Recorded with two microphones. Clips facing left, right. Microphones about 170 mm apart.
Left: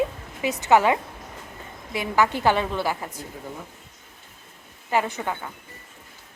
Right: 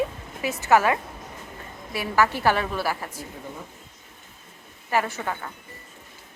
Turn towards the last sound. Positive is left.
turn(degrees=15)  # may be behind; listen again after turning